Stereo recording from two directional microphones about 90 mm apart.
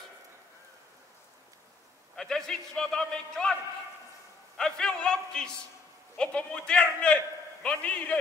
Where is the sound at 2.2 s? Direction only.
5° left (ahead or behind).